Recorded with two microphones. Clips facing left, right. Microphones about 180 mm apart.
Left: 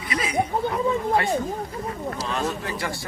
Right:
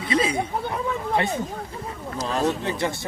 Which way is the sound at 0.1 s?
30° right (ahead or behind).